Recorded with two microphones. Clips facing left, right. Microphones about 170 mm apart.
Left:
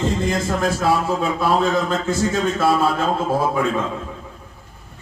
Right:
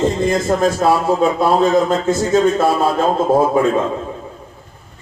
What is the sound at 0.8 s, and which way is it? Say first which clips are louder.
A man's voice: right 5 dB; 45° right (ahead or behind).